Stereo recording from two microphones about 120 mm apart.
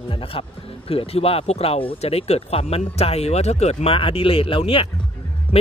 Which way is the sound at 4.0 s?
45° left (ahead or behind).